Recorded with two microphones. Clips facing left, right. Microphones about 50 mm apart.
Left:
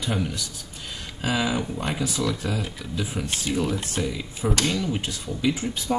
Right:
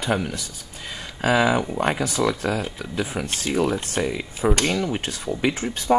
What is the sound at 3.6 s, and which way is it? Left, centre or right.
Speech, right.